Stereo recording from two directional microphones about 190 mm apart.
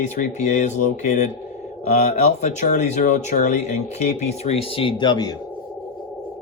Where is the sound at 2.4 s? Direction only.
40° left (ahead or behind); by 5.3 s 20° left (ahead or behind).